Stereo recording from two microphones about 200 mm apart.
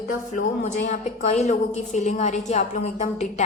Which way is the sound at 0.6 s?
35° left (ahead or behind).